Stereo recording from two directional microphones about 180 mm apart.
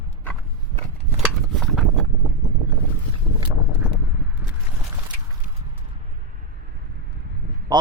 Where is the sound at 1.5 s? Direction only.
Centre (ahead or behind).